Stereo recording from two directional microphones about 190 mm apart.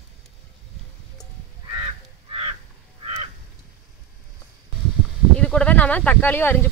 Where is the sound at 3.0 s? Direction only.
30° right (ahead or behind).